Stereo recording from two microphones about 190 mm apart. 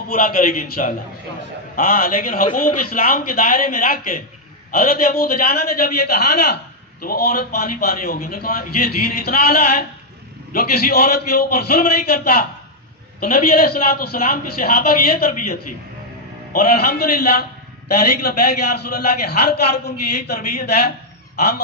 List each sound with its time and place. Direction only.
0.1 s a man's voice: 50° left (ahead or behind)